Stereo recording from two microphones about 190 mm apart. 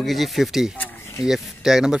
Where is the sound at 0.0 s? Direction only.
Centre (ahead or behind).